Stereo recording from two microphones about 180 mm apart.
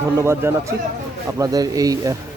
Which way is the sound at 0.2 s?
15° right (ahead or behind).